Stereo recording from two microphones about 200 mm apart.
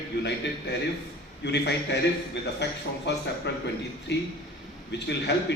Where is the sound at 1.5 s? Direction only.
60° left (ahead or behind).